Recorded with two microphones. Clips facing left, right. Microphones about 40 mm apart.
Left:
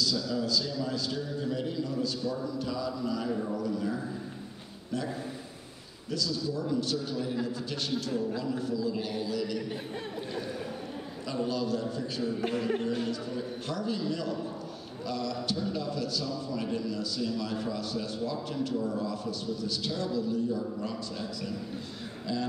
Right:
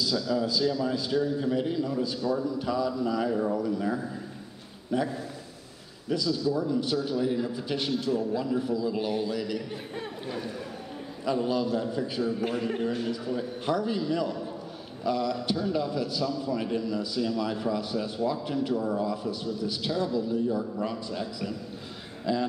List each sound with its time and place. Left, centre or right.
0.0 s a man's voice: centre
12.4 s speech: centre
13.1 s a man's voice: centre